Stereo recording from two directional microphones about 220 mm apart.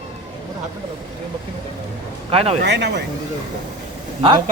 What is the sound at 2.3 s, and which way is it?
Speech, 25° right (ahead or behind).